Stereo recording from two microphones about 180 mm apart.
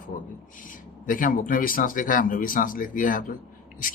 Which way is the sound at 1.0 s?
50° left (ahead or behind).